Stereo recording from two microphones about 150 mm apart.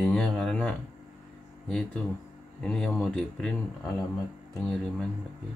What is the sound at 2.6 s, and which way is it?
Speech, 5° left (ahead or behind).